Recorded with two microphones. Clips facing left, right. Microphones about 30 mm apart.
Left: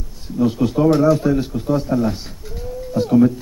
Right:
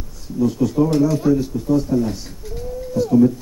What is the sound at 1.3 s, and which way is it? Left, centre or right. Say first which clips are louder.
Speech: right 1 dB; left.